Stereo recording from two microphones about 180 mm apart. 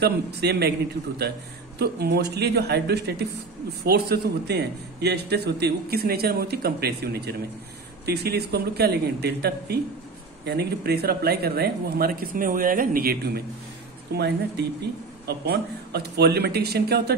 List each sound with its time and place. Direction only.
0.0 s a man's voice: 65° right (ahead or behind)